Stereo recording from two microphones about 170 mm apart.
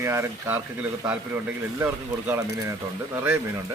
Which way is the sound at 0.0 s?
15° right (ahead or behind).